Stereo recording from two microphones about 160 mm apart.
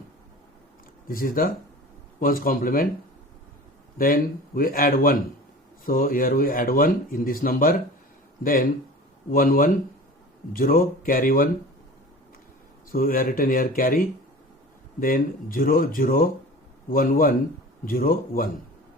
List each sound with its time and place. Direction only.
1.0 s speech: 60° left (ahead or behind)
3.9 s speech: 65° left (ahead or behind)
9.3 s speech: 60° left (ahead or behind)
12.9 s speech: 65° left (ahead or behind)